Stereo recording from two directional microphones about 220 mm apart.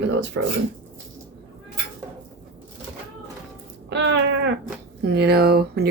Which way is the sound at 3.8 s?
50° right (ahead or behind).